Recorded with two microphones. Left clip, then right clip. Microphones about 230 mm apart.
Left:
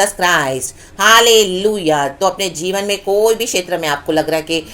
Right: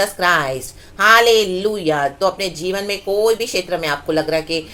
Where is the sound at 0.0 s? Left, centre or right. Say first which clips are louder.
Left 2 dB; centre.